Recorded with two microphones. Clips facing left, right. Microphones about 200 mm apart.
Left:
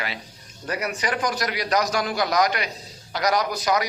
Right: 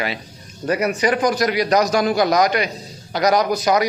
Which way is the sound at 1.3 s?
15° right (ahead or behind).